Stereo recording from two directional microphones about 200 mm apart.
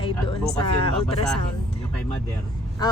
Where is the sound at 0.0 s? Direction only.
25° left (ahead or behind).